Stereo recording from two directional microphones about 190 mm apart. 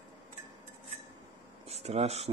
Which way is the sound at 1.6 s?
35° right (ahead or behind).